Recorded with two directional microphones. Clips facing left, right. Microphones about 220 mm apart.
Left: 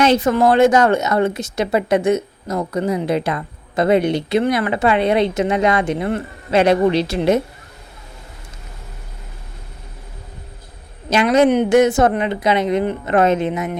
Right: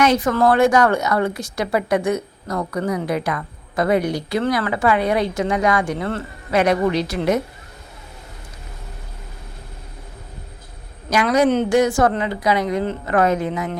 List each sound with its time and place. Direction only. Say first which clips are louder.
0.0 s a woman's voice: left 2 dB; 25° left (ahead or behind)
11.1 s a woman's voice: left 3 dB; 25° left (ahead or behind)